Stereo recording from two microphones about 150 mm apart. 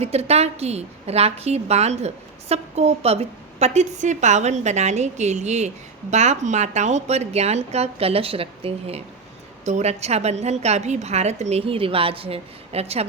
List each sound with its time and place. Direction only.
0.0 s a woman's voice: 45° right (ahead or behind)